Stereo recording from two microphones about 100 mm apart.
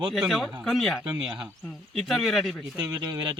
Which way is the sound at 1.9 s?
Centre (ahead or behind).